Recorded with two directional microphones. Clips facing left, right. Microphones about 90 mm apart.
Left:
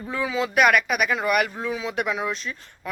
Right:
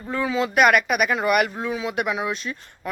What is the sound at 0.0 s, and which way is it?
Speech, centre (ahead or behind).